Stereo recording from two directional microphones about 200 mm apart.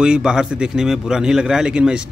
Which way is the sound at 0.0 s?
5° right (ahead or behind).